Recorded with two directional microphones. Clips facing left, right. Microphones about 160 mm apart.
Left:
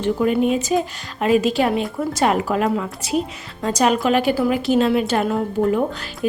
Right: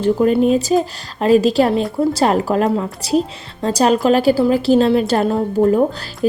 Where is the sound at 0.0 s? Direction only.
35° right (ahead or behind).